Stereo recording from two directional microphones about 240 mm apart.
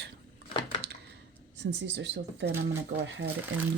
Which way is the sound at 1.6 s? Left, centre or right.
Right.